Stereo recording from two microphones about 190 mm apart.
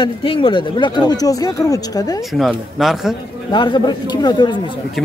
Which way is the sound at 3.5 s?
25° left (ahead or behind).